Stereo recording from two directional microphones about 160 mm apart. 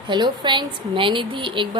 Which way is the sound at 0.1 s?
30° right (ahead or behind).